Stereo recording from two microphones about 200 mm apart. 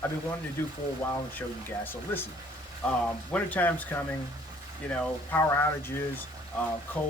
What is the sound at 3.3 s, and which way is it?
Speech, 10° left (ahead or behind).